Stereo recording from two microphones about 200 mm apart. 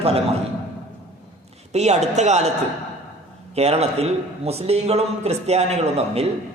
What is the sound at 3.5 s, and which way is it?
A man's voice, 30° right (ahead or behind).